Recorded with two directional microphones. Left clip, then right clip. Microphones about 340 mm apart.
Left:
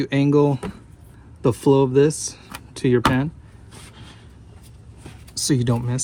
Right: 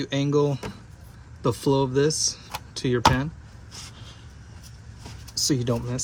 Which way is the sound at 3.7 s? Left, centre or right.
Left.